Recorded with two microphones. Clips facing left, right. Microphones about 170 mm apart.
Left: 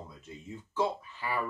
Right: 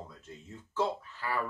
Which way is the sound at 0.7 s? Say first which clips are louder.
Left 1 dB; 15° left (ahead or behind).